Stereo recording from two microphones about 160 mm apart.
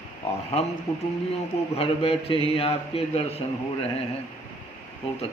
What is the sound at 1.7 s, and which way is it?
A man's voice, 40° left (ahead or behind).